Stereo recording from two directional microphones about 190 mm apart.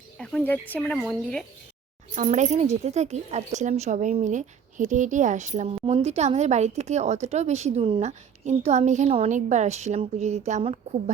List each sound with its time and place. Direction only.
0.2 s speech: 5° left (ahead or behind)
2.1 s speech: 40° right (ahead or behind)